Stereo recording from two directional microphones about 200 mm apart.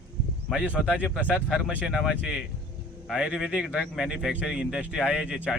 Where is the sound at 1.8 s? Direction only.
5° right (ahead or behind).